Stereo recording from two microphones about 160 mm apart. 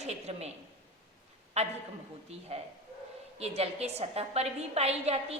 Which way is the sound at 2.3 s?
40° right (ahead or behind).